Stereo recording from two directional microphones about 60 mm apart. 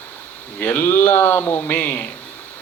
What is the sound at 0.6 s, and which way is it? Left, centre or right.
Speech, left.